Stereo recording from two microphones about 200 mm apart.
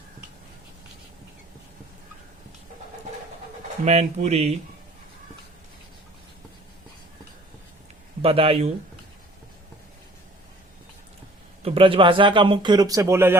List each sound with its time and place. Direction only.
3.8 s speech: 35° right (ahead or behind)
8.2 s speech: 30° right (ahead or behind)
11.6 s speech: 25° right (ahead or behind)